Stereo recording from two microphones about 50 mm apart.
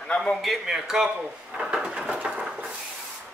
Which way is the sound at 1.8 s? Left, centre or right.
Centre.